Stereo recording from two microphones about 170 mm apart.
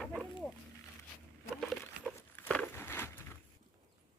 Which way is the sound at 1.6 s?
Centre (ahead or behind).